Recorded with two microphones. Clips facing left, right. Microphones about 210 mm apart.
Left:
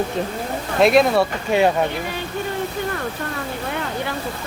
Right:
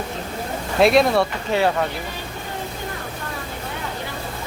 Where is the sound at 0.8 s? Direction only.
Centre (ahead or behind).